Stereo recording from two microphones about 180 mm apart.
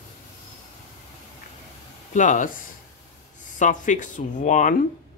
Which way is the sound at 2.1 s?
45° left (ahead or behind).